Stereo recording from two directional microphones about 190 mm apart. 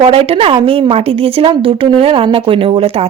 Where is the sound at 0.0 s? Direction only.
30° right (ahead or behind).